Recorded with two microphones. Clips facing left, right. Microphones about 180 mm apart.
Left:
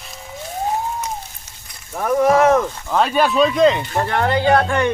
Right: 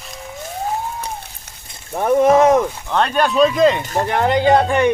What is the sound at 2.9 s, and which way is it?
Speech, 5° left (ahead or behind).